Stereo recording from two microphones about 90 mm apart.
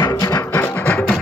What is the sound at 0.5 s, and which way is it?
Music, 15° left (ahead or behind).